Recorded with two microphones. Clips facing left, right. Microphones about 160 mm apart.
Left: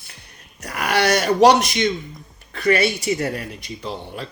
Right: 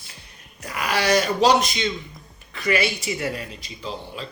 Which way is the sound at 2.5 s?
55° left (ahead or behind).